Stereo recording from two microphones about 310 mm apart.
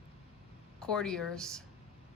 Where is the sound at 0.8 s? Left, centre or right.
Centre.